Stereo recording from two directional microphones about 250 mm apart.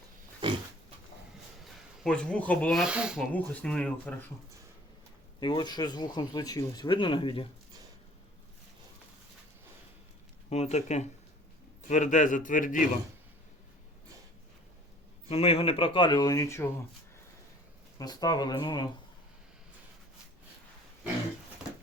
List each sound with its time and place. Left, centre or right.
1.6 s a sound: centre
2.5 s speech: centre
5.4 s speech: centre
10.5 s a man's voice: left
15.3 s speech: left
17.9 s speech: centre